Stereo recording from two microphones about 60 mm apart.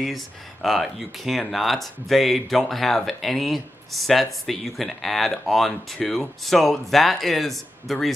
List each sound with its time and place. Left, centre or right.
0.0 s speech: centre